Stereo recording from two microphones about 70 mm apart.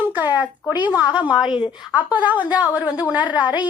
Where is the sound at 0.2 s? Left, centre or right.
Right.